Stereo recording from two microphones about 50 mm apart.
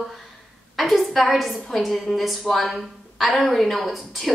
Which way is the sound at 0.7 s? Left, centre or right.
Centre.